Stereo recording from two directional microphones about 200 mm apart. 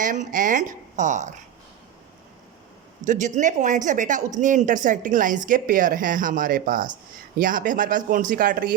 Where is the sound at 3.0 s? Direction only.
40° right (ahead or behind).